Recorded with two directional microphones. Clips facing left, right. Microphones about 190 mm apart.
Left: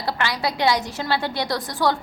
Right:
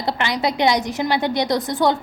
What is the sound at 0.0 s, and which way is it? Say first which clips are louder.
A woman's voice: right 3 dB; 20° right (ahead or behind).